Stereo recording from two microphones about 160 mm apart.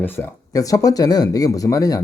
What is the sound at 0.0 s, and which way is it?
Speech, 15° left (ahead or behind).